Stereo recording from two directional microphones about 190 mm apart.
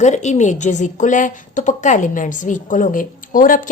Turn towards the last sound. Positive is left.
turn(degrees=45)  # may be behind; listen again after turning